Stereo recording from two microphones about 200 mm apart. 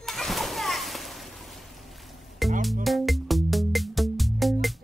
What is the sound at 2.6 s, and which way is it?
Music, centre (ahead or behind).